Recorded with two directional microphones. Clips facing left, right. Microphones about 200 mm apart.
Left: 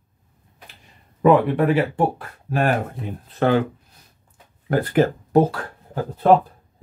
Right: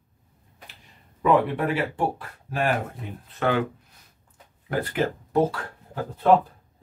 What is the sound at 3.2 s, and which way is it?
Speech, 35° left (ahead or behind).